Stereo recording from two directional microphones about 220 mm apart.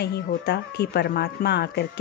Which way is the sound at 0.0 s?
45° left (ahead or behind).